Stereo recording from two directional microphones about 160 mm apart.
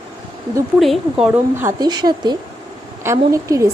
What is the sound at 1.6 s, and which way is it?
A woman's voice, 20° right (ahead or behind).